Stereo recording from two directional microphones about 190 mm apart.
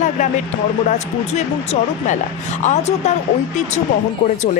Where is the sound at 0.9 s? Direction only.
35° left (ahead or behind).